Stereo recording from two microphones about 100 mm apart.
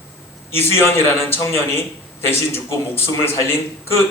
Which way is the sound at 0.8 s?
25° left (ahead or behind).